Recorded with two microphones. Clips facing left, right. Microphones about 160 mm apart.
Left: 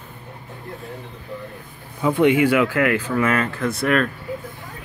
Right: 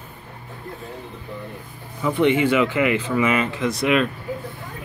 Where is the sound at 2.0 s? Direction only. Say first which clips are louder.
Left 2 dB; 10° left (ahead or behind).